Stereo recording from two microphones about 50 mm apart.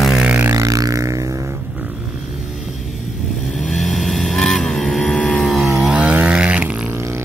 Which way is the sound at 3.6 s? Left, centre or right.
Centre.